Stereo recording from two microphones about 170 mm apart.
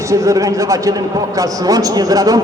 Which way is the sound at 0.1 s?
20° right (ahead or behind).